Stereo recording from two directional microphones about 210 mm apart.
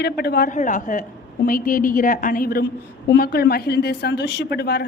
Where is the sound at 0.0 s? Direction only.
50° left (ahead or behind).